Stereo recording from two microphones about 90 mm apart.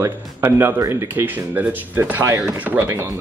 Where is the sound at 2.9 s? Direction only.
30° right (ahead or behind).